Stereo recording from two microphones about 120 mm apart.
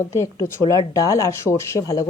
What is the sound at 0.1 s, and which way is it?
Speech, 25° left (ahead or behind).